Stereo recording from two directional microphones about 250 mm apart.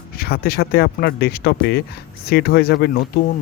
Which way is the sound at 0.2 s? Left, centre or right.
Left.